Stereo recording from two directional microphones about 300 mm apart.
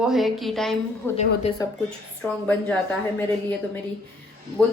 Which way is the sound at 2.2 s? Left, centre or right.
Centre.